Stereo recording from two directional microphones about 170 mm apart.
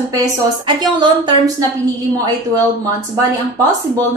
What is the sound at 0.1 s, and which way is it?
Speech, 20° right (ahead or behind).